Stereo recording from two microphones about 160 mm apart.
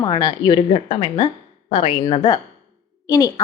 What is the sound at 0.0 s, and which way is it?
A woman's voice, 25° left (ahead or behind).